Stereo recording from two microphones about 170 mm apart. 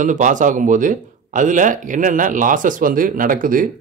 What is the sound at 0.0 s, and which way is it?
Speech, 50° right (ahead or behind).